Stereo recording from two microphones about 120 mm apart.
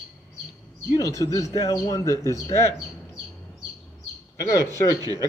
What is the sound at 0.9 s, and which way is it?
A man's voice, 30° left (ahead or behind).